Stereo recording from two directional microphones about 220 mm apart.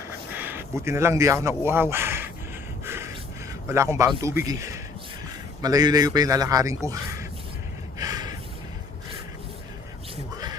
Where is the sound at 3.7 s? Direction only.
10° right (ahead or behind).